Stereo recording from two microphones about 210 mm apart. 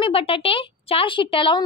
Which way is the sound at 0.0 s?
25° left (ahead or behind).